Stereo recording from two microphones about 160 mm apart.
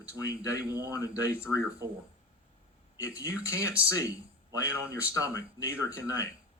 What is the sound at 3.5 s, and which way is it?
Speech, 10° right (ahead or behind).